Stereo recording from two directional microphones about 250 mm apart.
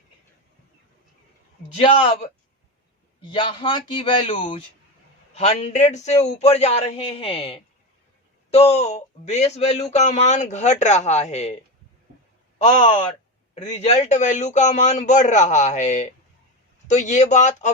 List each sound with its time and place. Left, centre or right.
1.7 s speech: left
3.2 s speech: left
12.6 s speech: left